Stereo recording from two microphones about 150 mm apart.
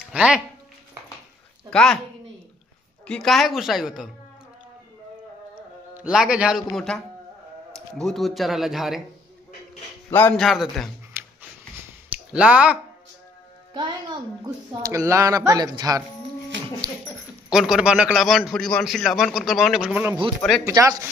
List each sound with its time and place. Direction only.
0.1 s music: 10° right (ahead or behind)
1.7 s speech: 5° left (ahead or behind)
3.1 s a man's voice: centre (ahead or behind)
5.9 s a man's voice: 5° right (ahead or behind)
7.7 s a man's voice: 5° left (ahead or behind)
10.3 s a man's voice: centre (ahead or behind)
11.1 s a sound: 15° right (ahead or behind)
12.1 s speech: 10° right (ahead or behind)
13.7 s speech: 30° right (ahead or behind)
16.8 s a sound: 30° right (ahead or behind)
17.5 s a man's voice: 5° right (ahead or behind); by 21.1 s 20° right (ahead or behind)